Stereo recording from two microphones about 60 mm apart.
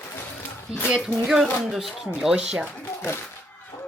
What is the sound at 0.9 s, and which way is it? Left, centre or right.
Speech, centre.